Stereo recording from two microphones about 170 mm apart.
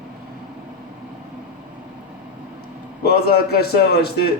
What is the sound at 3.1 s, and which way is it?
A man's voice, 65° left (ahead or behind).